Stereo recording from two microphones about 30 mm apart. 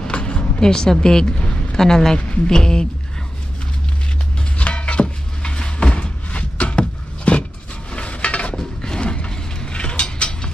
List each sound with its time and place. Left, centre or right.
0.0 s music: left
1.8 s speech: centre
2.1 s speech: left
2.5 s speech: left
4.6 s a sound: left
8.5 s a sound: left
9.0 s vehicle: left
9.7 s mechanisms: left